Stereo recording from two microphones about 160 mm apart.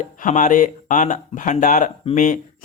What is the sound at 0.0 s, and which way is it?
Speech, 55° left (ahead or behind).